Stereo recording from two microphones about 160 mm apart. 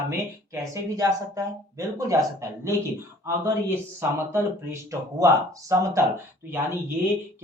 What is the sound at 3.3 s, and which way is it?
Speech, 15° right (ahead or behind).